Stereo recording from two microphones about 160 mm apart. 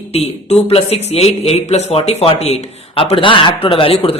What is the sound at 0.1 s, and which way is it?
Speech, 40° left (ahead or behind).